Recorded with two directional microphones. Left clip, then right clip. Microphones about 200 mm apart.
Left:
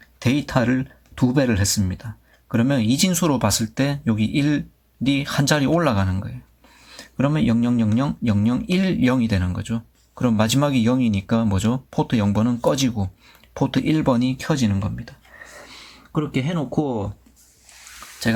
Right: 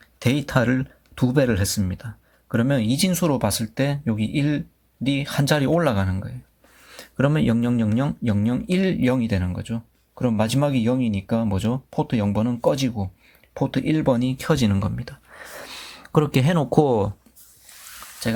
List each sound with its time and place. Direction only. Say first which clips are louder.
0.2 s speech: left 1 dB; 20° right (ahead or behind)
6.9 s speech: right 1 dB; 20° right (ahead or behind)
15.5 s a sound: right 4 dB; 50° right (ahead or behind)